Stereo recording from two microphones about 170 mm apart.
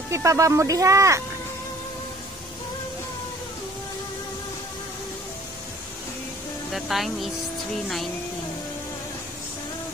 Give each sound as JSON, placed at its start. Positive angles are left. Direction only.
{"t": 0.1, "sound": "speech", "side_deg": -15}
{"t": 6.7, "sound": "speech", "side_deg": 0}